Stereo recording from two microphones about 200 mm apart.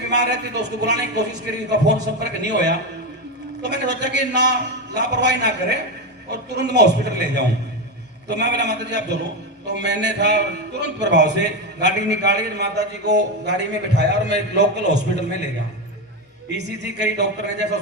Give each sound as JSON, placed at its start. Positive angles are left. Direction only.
{"t": 0.1, "sound": "a man's voice", "side_deg": -60}
{"t": 16.6, "sound": "a man's voice", "side_deg": -60}